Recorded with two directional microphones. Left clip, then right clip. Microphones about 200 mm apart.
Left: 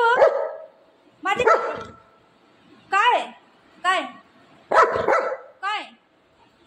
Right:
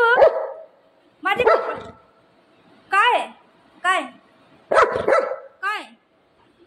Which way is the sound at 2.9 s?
5° right (ahead or behind).